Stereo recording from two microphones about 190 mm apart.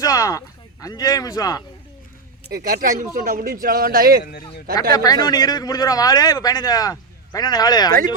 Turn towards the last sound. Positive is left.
turn(degrees=20)  # may be behind; listen again after turning